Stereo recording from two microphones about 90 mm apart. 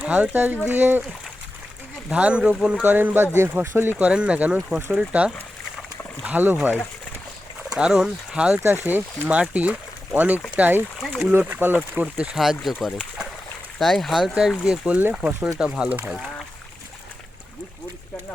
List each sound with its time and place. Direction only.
0.0 s speech: 15° right (ahead or behind)
2.0 s speech: 15° right (ahead or behind)
2.8 s speech: 20° right (ahead or behind)
3.9 s speech: 15° right (ahead or behind)
7.7 s speech: 10° right (ahead or behind)
14.6 s speech: 10° right (ahead or behind)
15.5 s speech: 10° right (ahead or behind)